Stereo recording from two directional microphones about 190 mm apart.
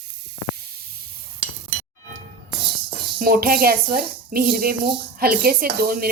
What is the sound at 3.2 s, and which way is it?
A woman's voice, 50° right (ahead or behind).